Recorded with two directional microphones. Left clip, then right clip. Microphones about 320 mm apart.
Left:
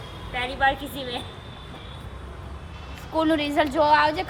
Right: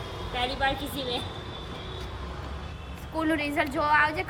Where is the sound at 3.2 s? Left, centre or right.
Centre.